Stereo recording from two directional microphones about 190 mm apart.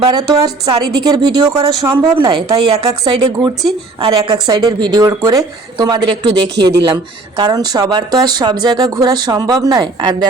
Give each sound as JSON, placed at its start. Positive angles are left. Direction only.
{"t": 0.0, "sound": "speech", "side_deg": -20}